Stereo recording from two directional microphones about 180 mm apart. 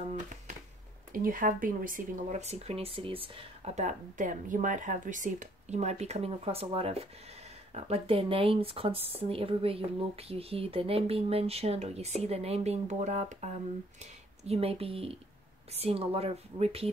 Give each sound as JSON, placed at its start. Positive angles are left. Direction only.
{"t": 1.1, "sound": "speech", "side_deg": -50}